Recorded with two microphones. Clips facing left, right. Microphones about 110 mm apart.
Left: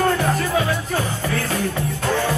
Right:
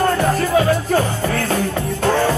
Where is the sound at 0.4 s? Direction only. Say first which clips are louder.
Right 5 dB; 45° right (ahead or behind).